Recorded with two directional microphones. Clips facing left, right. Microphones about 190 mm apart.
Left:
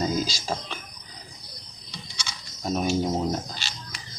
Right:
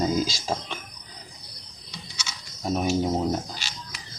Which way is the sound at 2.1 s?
5° right (ahead or behind).